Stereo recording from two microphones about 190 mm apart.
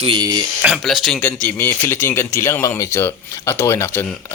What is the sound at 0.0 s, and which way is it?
Speech, 25° right (ahead or behind).